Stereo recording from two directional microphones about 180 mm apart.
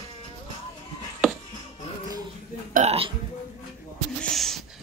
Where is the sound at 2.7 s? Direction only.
35° right (ahead or behind).